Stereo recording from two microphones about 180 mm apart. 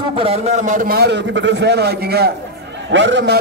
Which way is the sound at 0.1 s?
35° right (ahead or behind).